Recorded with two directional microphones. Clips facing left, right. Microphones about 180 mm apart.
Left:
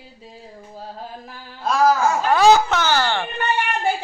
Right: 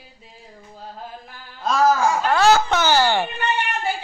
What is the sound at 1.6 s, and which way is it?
Speech, 10° left (ahead or behind).